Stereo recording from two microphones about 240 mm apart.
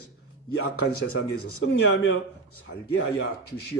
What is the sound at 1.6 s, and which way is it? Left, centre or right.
Speech, left.